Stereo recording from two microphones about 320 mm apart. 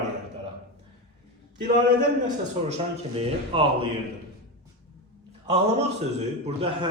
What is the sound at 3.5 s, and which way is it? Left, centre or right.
Speech, centre.